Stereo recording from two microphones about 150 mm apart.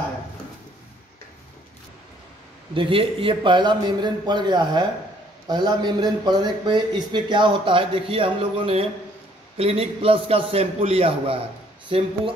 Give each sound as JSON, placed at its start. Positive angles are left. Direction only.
{"t": 2.7, "sound": "a man's voice", "side_deg": -35}